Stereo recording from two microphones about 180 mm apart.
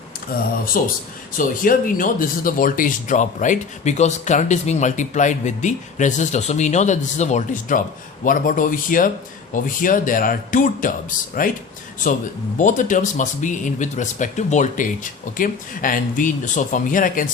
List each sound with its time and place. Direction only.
0.6 s speech: 55° left (ahead or behind)